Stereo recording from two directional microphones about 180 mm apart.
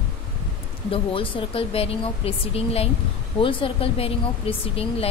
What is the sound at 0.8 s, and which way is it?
A woman's voice, 30° left (ahead or behind).